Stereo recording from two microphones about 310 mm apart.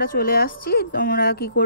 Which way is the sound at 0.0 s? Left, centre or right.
Left.